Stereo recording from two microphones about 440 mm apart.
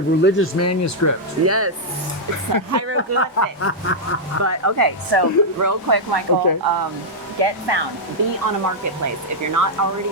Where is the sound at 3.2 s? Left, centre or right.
Left.